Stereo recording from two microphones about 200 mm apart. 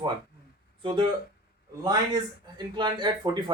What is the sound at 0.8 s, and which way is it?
Speech, 25° right (ahead or behind).